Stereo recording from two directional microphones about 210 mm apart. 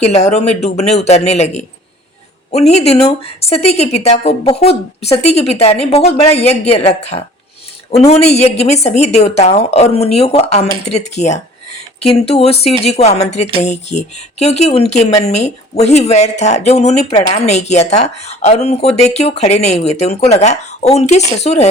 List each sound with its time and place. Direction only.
0.0 s speech: 30° left (ahead or behind)
2.5 s speech: 30° left (ahead or behind)